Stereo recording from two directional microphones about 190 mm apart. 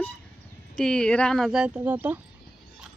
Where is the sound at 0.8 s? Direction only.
5° left (ahead or behind).